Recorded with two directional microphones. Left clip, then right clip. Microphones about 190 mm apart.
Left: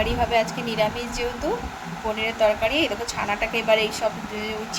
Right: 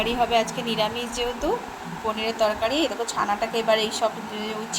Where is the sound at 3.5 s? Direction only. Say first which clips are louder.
Left 2 dB; 20° left (ahead or behind).